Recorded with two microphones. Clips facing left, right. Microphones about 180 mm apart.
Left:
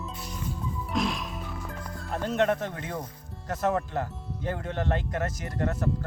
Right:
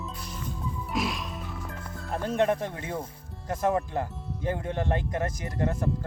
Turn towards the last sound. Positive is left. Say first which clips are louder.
# right 1 dB
turn(degrees=-10)  # may be behind; listen again after turning